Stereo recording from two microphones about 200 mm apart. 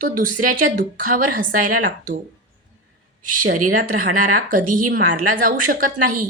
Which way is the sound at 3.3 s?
45° right (ahead or behind).